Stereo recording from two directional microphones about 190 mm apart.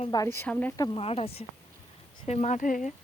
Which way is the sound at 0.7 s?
20° left (ahead or behind).